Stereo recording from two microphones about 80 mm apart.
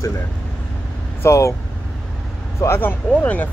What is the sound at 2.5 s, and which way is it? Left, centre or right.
Speech, left.